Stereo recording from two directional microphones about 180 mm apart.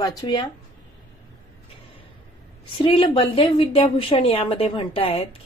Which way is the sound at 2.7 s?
30° left (ahead or behind).